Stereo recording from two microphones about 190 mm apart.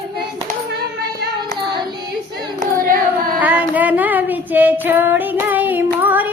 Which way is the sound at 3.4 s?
10° right (ahead or behind).